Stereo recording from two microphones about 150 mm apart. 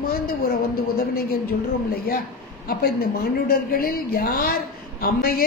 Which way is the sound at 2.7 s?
85° left.